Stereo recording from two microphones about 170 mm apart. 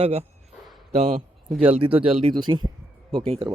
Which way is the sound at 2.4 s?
25° right (ahead or behind).